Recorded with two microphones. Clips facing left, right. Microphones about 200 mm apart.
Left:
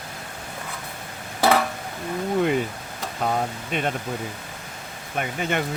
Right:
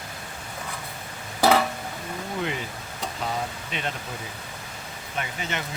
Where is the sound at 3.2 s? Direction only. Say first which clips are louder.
Left 7 dB; 50° left (ahead or behind).